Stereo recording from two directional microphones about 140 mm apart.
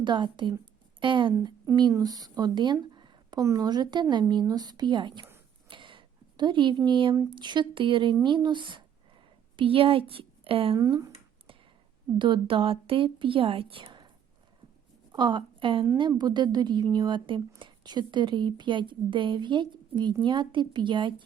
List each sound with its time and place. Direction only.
0.0 s speech: 35° right (ahead or behind)
0.6 s a sound: 35° right (ahead or behind)
1.7 s speech: 30° right (ahead or behind)
5.6 s a sound: 35° right (ahead or behind)
7.3 s a woman's voice: 35° right (ahead or behind)
12.2 s speech: 35° right (ahead or behind)
15.1 s a woman's voice: 35° right (ahead or behind)